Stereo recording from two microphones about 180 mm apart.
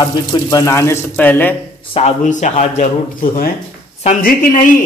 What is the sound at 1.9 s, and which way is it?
Speech, 40° left (ahead or behind).